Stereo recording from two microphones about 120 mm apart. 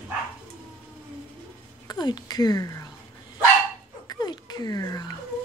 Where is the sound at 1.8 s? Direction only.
35° left (ahead or behind).